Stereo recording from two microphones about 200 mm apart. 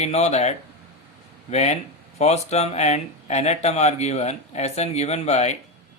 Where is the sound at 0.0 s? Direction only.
35° left (ahead or behind).